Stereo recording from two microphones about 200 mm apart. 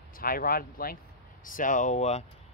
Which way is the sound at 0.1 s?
45° left (ahead or behind).